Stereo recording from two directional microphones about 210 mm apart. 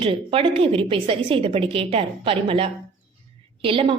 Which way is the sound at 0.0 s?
25° right (ahead or behind).